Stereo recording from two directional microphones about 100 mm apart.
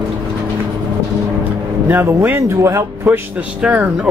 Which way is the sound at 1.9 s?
25° right (ahead or behind).